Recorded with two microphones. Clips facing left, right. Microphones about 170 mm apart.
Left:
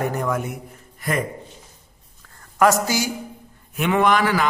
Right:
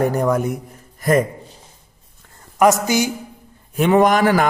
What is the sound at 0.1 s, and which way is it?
Speech, 35° right (ahead or behind).